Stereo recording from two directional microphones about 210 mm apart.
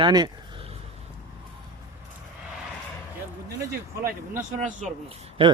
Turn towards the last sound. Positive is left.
turn(degrees=-30)  # may be behind; listen again after turning